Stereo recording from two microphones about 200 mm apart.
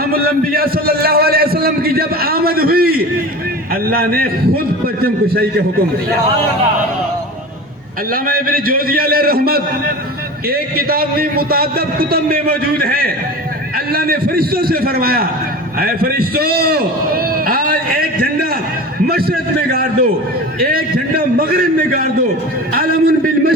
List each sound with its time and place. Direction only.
0.0 s a man's voice: 50° right (ahead or behind)
8.1 s a man's voice: 45° right (ahead or behind)
15.8 s a sound: 50° right (ahead or behind)
19.0 s a man's voice: 50° right (ahead or behind)
22.7 s a man's voice: 50° right (ahead or behind)